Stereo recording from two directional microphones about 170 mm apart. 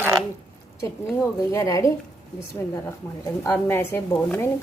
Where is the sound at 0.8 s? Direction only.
15° left (ahead or behind).